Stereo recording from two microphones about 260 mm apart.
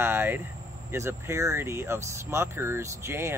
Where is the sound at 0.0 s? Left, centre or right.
Centre.